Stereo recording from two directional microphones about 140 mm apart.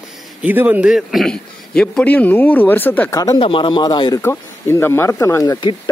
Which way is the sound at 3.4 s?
35° left (ahead or behind).